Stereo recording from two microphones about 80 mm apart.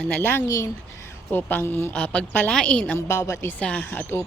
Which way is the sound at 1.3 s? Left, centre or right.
Left.